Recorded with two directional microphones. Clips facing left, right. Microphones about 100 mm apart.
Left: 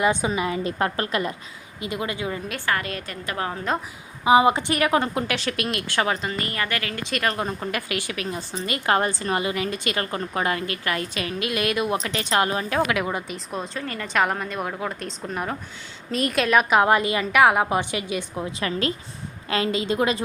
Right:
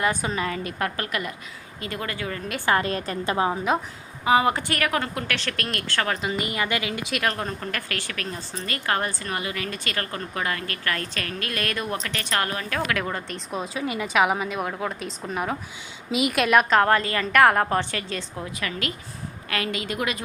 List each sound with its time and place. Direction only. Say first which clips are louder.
0.0 s a woman's voice: left 3 dB; 20° left (ahead or behind)
1.8 s a woman's voice: left 3 dB; 20° left (ahead or behind)
2.6 s a woman's voice: right 5 dB; 30° right (ahead or behind)
3.3 s a woman's voice: right 4 dB; 20° right (ahead or behind)
4.2 s a woman's voice: left 3 dB; 20° left (ahead or behind)
6.2 s a woman's voice: right 1 dB; 15° right (ahead or behind)
13.8 s a woman's voice: right 2 dB; 10° right (ahead or behind)
16.6 s a woman's voice: left 1 dB; 10° left (ahead or behind)
18.6 s a woman's voice: left 6 dB; 30° left (ahead or behind)